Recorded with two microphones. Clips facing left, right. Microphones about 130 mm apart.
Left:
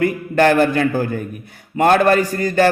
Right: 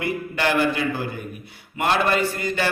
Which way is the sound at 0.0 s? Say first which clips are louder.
Left 9 dB; 45° left (ahead or behind).